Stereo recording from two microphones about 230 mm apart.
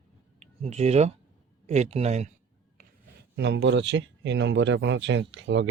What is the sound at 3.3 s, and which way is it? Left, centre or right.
Speech, right.